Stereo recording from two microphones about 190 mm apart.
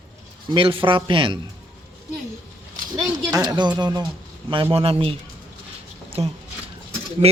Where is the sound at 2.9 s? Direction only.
20° right (ahead or behind).